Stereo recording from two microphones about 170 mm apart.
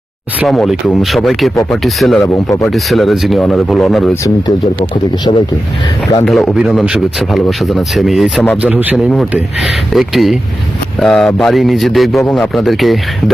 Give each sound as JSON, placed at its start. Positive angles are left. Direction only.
{"t": 0.3, "sound": "a man's voice", "side_deg": 0}
{"t": 2.2, "sound": "speech", "side_deg": 20}
{"t": 2.6, "sound": "a man's voice", "side_deg": 0}
{"t": 4.1, "sound": "speech", "side_deg": 20}
{"t": 6.2, "sound": "a man's voice", "side_deg": 0}